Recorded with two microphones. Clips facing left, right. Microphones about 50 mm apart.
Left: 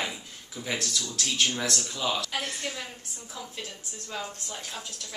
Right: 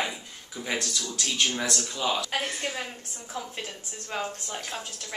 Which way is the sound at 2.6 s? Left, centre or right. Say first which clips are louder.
Right 3 dB; right.